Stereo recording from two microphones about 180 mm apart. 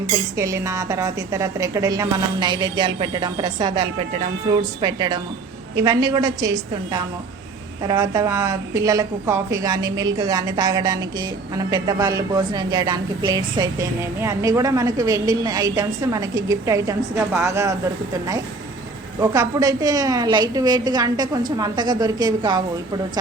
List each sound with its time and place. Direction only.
0.3 s a woman's voice: 15° right (ahead or behind)
19.2 s a woman's voice: 15° right (ahead or behind)